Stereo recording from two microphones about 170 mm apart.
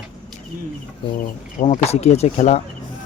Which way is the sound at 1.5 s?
40° left (ahead or behind).